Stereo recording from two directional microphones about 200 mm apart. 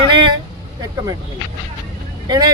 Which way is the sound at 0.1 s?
20° right (ahead or behind).